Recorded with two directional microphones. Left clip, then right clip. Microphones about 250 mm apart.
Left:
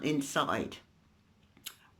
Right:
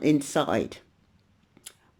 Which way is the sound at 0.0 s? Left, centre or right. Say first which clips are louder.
Right 7 dB; centre.